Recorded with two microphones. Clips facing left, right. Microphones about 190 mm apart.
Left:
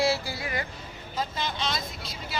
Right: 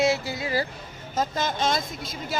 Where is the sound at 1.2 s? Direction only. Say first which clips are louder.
Right 5 dB; 45° right (ahead or behind).